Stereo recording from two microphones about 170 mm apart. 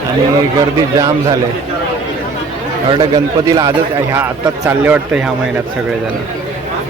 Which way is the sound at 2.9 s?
25° right (ahead or behind).